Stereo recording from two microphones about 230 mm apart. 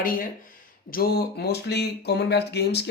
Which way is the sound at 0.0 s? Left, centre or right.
Left.